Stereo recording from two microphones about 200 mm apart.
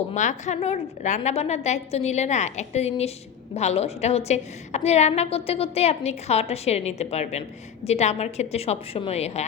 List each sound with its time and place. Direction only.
0.1 s a woman's voice: 35° left (ahead or behind)